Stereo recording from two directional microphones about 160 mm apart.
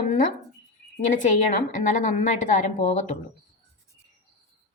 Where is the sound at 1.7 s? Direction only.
55° left (ahead or behind).